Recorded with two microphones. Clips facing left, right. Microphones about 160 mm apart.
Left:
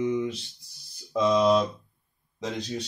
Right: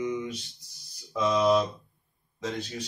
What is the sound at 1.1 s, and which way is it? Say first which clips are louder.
Mantra: left 3 dB; 20° left (ahead or behind).